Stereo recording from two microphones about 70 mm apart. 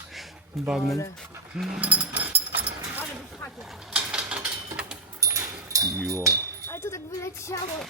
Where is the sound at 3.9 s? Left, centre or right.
Centre.